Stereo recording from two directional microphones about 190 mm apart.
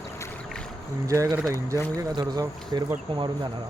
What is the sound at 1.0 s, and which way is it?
Speech, 15° right (ahead or behind).